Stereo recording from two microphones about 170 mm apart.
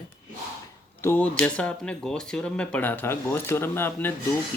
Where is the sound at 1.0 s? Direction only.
10° left (ahead or behind).